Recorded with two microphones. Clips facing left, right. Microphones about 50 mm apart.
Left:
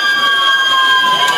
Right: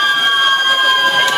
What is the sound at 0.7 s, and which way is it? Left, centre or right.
Run, centre.